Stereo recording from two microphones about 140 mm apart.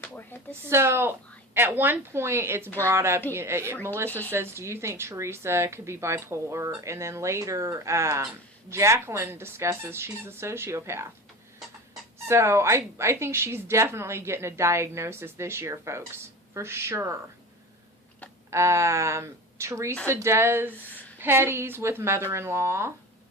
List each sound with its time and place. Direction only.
0.0 s a sound: 15° left (ahead or behind)
0.7 s a woman's voice: 20° right (ahead or behind)
12.3 s a woman's voice: 20° right (ahead or behind)
18.5 s a woman's voice: 20° right (ahead or behind)